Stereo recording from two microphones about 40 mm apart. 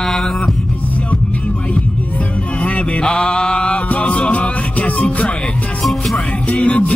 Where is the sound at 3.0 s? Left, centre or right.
Left.